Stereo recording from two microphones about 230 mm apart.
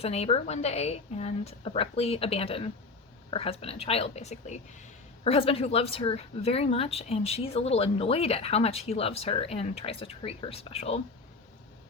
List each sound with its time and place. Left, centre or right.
0.0 s a woman's voice: left